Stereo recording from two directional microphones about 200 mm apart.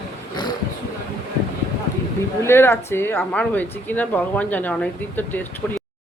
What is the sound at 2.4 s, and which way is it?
Speech, 10° left (ahead or behind).